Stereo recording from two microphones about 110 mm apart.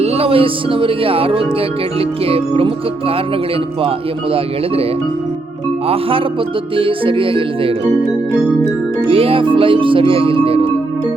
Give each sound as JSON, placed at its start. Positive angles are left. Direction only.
{"t": 0.0, "sound": "speech", "side_deg": -60}
{"t": 5.9, "sound": "speech", "side_deg": -55}
{"t": 6.7, "sound": "music", "side_deg": -55}
{"t": 9.0, "sound": "speech", "side_deg": -55}